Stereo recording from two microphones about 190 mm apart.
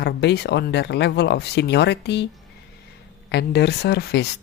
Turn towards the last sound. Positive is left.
turn(degrees=60)  # may be behind; listen again after turning